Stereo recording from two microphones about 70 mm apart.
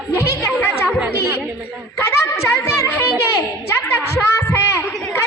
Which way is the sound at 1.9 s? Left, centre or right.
Left.